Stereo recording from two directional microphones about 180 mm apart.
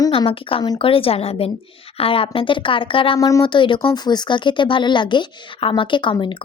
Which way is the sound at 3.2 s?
20° left (ahead or behind).